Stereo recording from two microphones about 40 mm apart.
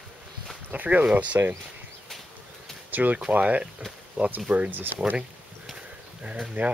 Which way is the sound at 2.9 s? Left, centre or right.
Right.